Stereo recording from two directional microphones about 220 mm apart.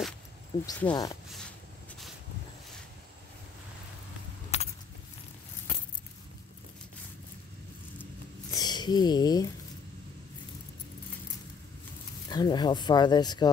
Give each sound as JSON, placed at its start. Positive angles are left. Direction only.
{"t": 0.7, "sound": "speech", "side_deg": 5}
{"t": 4.5, "sound": "a sound", "side_deg": 30}
{"t": 8.5, "sound": "speech", "side_deg": 20}
{"t": 12.3, "sound": "speech", "side_deg": 20}